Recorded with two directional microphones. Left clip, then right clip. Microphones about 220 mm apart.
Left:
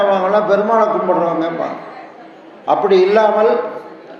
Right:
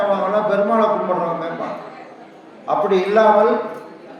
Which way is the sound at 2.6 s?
15° left (ahead or behind).